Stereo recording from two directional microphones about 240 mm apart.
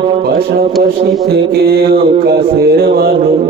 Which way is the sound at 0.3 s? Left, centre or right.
Right.